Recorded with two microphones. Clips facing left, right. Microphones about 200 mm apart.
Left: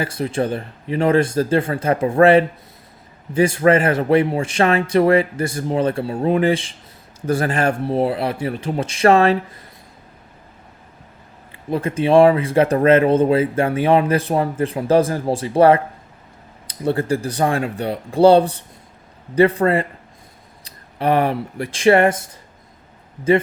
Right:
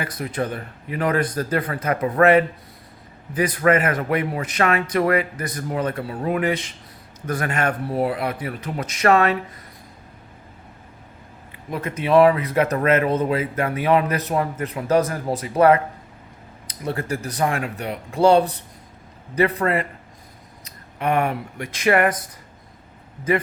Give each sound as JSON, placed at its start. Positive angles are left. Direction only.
{"t": 0.0, "sound": "speech", "side_deg": 30}
{"t": 11.7, "sound": "speech", "side_deg": 30}